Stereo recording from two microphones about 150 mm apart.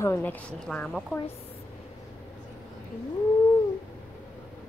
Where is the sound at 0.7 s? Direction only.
Centre (ahead or behind).